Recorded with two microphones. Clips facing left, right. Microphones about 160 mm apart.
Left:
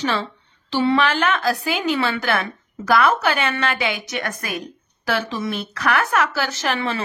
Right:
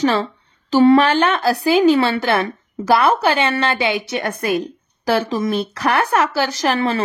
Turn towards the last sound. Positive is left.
turn(degrees=-40)  # may be behind; listen again after turning